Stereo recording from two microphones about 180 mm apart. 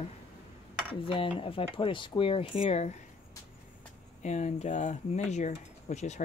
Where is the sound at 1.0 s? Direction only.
30° left (ahead or behind).